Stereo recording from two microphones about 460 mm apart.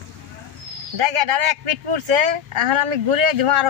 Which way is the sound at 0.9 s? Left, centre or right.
Right.